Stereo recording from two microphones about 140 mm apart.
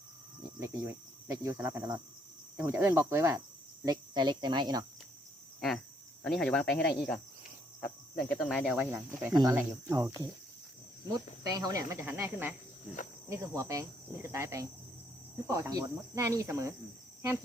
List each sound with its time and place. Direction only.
0.6 s speech: 20° right (ahead or behind)
3.8 s speech: 30° right (ahead or behind)
5.5 s speech: centre (ahead or behind)
7.8 s cricket: 60° left (ahead or behind)
8.3 s speech: 5° left (ahead or behind); by 10.1 s 20° right (ahead or behind)
11.1 s speech: 25° right (ahead or behind)